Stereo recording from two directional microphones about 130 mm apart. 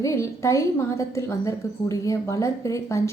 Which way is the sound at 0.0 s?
25° left (ahead or behind).